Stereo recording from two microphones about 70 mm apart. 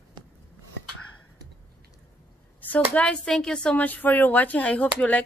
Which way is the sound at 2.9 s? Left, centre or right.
Centre.